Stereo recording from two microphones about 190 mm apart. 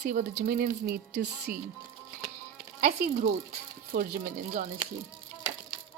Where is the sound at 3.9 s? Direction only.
50° right (ahead or behind).